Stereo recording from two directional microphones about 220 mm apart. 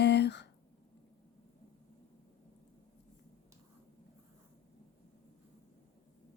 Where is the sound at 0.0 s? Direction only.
50° left (ahead or behind).